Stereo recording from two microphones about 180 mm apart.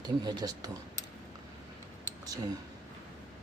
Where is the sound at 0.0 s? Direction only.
20° right (ahead or behind).